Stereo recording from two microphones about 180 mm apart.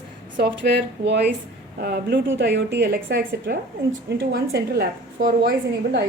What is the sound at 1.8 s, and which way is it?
A woman's voice, 60° right (ahead or behind).